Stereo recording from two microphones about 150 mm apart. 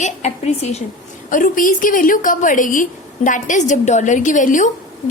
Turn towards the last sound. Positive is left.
turn(degrees=60)  # may be behind; listen again after turning